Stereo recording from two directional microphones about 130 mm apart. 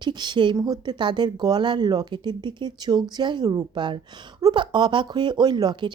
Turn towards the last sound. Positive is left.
turn(degrees=-35)  # may be behind; listen again after turning